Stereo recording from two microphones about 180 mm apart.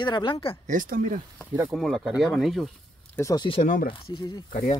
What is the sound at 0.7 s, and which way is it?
Speech, 50° right (ahead or behind).